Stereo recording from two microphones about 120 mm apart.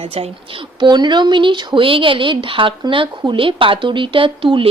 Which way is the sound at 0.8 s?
40° right (ahead or behind).